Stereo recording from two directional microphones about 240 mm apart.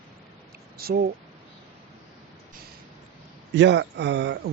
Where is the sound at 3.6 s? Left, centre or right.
Right.